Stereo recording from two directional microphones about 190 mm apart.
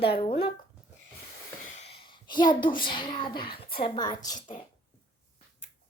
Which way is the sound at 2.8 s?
25° left (ahead or behind).